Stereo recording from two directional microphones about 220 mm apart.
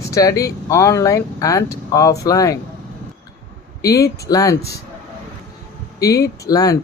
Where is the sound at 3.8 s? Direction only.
15° left (ahead or behind).